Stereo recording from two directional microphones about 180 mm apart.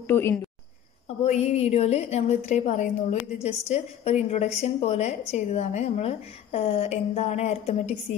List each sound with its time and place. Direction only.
0.1 s speech: 15° left (ahead or behind)
1.2 s a woman's voice: 35° left (ahead or behind)